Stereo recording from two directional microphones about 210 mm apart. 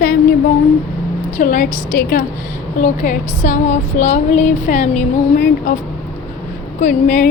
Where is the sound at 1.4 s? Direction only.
35° left (ahead or behind).